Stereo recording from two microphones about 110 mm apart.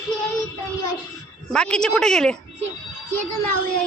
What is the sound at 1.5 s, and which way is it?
Speech, 5° left (ahead or behind).